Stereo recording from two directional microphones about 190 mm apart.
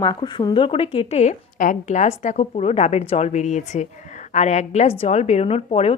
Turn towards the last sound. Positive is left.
turn(degrees=30)  # may be behind; listen again after turning